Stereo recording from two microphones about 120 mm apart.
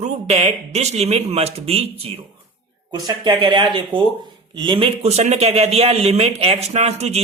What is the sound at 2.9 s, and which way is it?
Speech, 35° right (ahead or behind).